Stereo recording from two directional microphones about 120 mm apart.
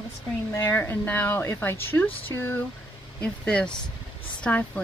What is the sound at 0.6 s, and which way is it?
Speech, 15° left (ahead or behind).